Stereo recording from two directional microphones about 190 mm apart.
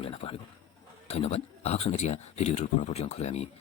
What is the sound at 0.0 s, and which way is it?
A man's voice, 30° left (ahead or behind).